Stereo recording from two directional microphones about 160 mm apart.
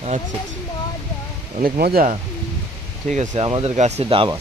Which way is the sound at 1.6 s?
70° right (ahead or behind).